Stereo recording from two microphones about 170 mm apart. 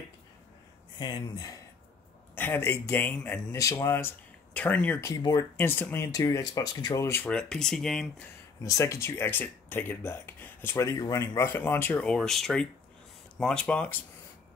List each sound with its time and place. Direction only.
0.9 s speech: 25° left (ahead or behind)
7.2 s speech: 5° left (ahead or behind)
8.6 s speech: 15° left (ahead or behind)